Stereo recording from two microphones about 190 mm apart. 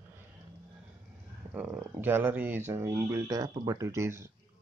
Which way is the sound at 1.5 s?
10° right (ahead or behind).